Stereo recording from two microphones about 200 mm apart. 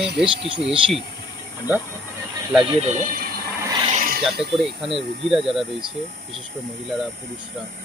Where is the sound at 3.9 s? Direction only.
40° right (ahead or behind).